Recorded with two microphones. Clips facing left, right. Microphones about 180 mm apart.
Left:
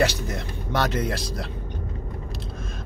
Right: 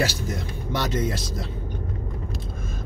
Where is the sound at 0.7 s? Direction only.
60° left (ahead or behind).